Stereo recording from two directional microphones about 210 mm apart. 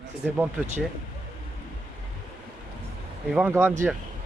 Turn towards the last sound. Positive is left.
turn(degrees=-10)  # may be behind; listen again after turning